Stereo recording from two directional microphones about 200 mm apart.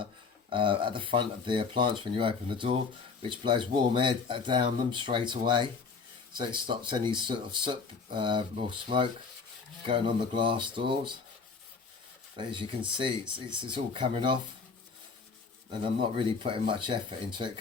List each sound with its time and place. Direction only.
0.5 s speech: 25° right (ahead or behind)
12.4 s speech: 25° right (ahead or behind)
15.8 s speech: 25° right (ahead or behind)